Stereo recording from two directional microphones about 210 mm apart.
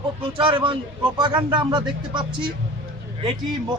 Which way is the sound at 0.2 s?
25° right (ahead or behind).